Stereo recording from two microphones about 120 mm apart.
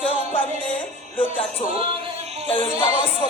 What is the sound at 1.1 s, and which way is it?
Speech, 50° left (ahead or behind).